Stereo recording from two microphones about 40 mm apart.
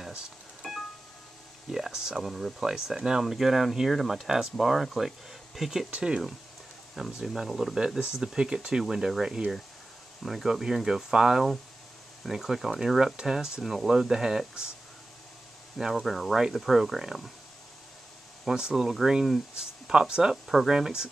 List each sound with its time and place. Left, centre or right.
0.6 s music: centre
1.7 s a sound: centre
2.2 s speech: centre
2.6 s speech: centre
5.9 s speech: right
7.0 s speech: centre
8.0 s speech: right
13.1 s speech: centre
13.6 s speech: centre
16.0 s speech: centre
18.4 s speech: centre
19.5 s speech: right
20.4 s speech: centre
20.7 s speech: centre